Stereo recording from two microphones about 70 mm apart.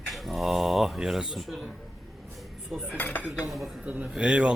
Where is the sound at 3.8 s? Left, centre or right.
Right.